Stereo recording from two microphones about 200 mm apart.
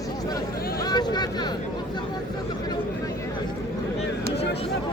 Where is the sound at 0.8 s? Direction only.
20° left (ahead or behind).